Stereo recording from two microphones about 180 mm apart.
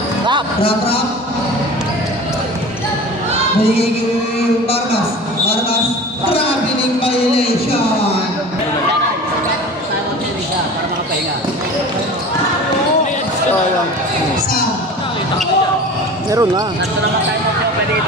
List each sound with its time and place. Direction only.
0.6 s speech: 30° left (ahead or behind)
3.6 s speech: 35° left (ahead or behind)
7.0 s speech: 35° left (ahead or behind)
16.3 s speech: 20° right (ahead or behind)